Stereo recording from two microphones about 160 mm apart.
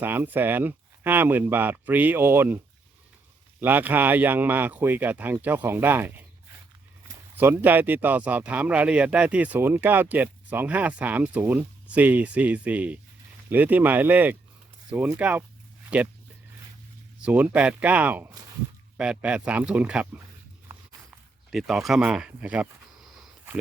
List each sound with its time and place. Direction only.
0.0 s speech: 10° right (ahead or behind)
3.6 s speech: 10° right (ahead or behind)
7.3 s speech: 10° right (ahead or behind)
17.2 s speech: 10° right (ahead or behind)
21.5 s speech: centre (ahead or behind)